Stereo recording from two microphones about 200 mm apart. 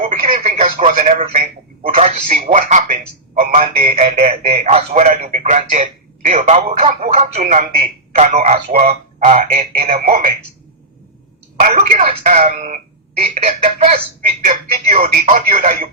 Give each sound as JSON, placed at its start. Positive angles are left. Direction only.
{"t": 0.0, "sound": "radio", "side_deg": -35}
{"t": 2.0, "sound": "a man's voice", "side_deg": -30}
{"t": 3.6, "sound": "a man's voice", "side_deg": -30}
{"t": 11.6, "sound": "a man's voice", "side_deg": -35}